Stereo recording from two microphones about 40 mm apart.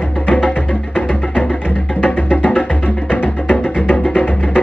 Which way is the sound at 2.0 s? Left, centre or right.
Left.